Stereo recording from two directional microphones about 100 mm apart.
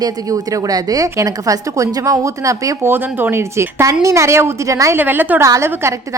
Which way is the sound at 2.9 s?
20° right (ahead or behind).